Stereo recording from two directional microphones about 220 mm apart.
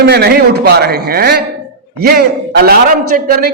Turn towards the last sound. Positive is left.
turn(degrees=-45)  # may be behind; listen again after turning